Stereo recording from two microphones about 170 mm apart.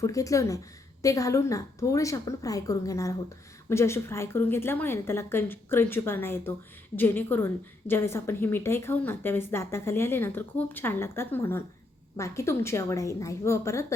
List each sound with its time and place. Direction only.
0.0 s a woman's voice: 20° left (ahead or behind)